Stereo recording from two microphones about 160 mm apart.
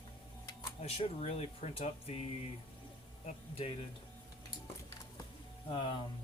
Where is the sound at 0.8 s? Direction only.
40° left (ahead or behind).